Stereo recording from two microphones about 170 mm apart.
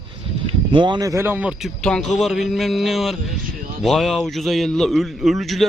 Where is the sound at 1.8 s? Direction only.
5° left (ahead or behind).